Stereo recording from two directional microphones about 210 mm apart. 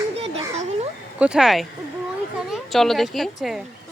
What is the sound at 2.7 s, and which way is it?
Speech, centre (ahead or behind).